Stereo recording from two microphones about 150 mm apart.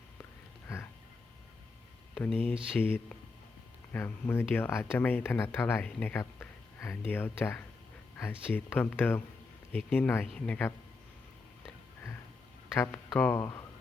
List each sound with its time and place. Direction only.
2.1 s speech: 10° left (ahead or behind)
12.7 s speech: 15° left (ahead or behind)